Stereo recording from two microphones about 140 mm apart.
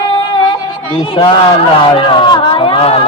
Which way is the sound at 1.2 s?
35° left (ahead or behind).